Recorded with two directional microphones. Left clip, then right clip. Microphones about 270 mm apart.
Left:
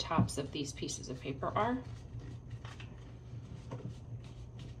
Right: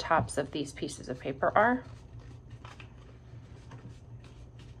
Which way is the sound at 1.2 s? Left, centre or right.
Centre.